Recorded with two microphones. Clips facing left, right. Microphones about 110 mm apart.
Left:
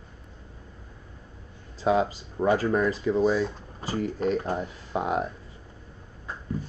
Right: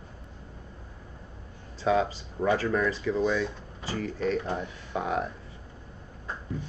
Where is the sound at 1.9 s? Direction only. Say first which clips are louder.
Left 2 dB; 20° left (ahead or behind).